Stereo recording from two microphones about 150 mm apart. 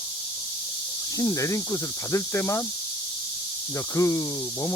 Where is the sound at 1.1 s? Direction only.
20° left (ahead or behind).